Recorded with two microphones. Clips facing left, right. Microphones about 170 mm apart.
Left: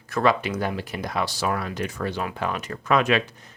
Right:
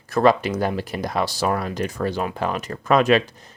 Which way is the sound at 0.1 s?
40° right (ahead or behind).